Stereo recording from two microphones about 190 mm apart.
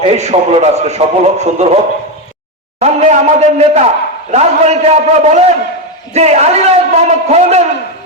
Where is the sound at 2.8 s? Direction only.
35° right (ahead or behind).